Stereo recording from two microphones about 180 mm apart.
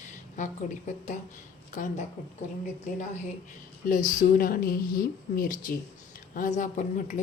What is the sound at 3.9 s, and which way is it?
Speech, 45° left (ahead or behind).